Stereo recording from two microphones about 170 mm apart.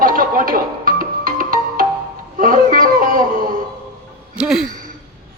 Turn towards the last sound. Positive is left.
turn(degrees=-5)  # may be behind; listen again after turning